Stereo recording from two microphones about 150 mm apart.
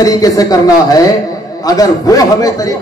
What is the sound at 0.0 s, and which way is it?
A man's voice, 25° left (ahead or behind).